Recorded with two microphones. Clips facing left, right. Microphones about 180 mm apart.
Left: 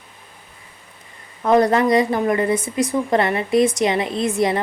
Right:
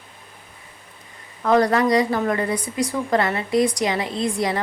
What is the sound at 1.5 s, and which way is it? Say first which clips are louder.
A woman's voice: left 2 dB; 20° left (ahead or behind).